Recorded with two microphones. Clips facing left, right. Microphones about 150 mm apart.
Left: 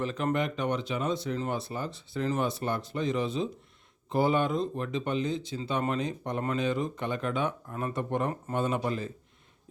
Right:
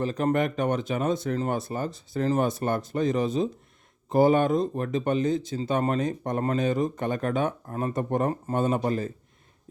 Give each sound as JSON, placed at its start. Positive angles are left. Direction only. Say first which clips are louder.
{"t": 0.0, "sound": "speech", "louder": "right 4 dB", "side_deg": -40}